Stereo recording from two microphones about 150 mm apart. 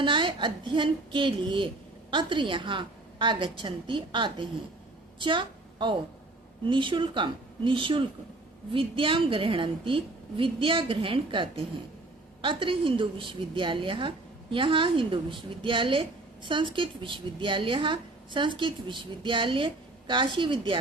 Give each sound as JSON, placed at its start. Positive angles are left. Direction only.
{"t": 0.0, "sound": "a woman's voice", "side_deg": -35}